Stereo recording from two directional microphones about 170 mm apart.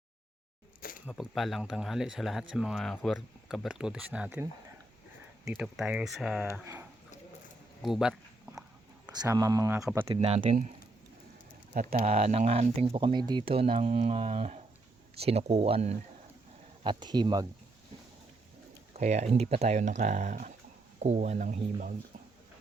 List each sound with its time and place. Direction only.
0.8 s a sound: 55° left (ahead or behind)
1.2 s speech: centre (ahead or behind)
5.5 s speech: 5° right (ahead or behind)
6.5 s speech: 15° right (ahead or behind)
7.8 s speech: centre (ahead or behind)
9.2 s speech: 20° right (ahead or behind)
10.1 s speech: 35° right (ahead or behind)
10.4 s speech: 45° right (ahead or behind)
11.7 s speech: 50° right (ahead or behind)
16.8 s speech: 25° right (ahead or behind)
18.9 s speech: 40° right (ahead or behind)